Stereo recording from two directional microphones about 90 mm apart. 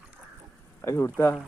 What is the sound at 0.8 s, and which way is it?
Speech, 25° left (ahead or behind).